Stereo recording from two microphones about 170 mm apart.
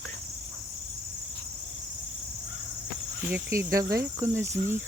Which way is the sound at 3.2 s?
15° right (ahead or behind).